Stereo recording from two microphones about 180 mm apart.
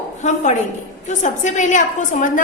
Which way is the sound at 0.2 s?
40° left (ahead or behind).